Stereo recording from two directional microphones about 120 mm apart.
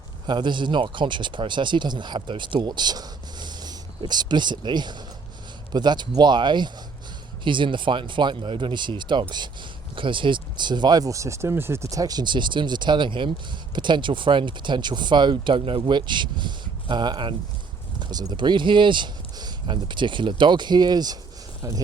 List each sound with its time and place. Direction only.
0.3 s speech: 40° right (ahead or behind)